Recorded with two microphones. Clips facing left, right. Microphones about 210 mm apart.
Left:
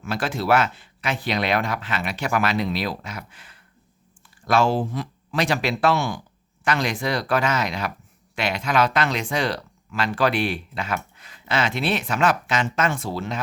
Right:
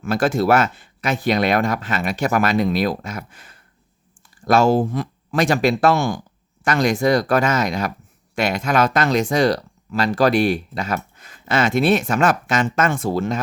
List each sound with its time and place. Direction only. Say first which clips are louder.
0.0 s speech: right 8 dB; 45° right (ahead or behind)